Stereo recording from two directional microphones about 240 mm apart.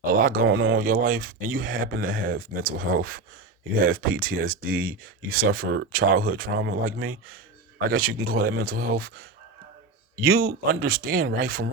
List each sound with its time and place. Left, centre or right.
0.1 s speech: right
0.4 s speech: right
0.8 s speech: right